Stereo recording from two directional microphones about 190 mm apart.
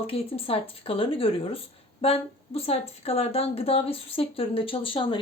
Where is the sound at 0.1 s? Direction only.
30° left (ahead or behind).